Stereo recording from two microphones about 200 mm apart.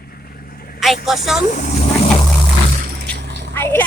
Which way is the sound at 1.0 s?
Centre (ahead or behind).